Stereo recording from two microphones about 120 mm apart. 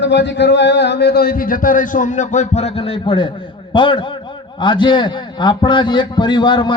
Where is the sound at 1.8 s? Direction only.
90° left.